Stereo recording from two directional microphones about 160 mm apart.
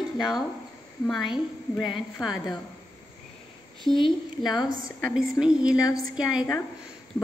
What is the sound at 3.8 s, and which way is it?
A woman's voice, 30° left (ahead or behind).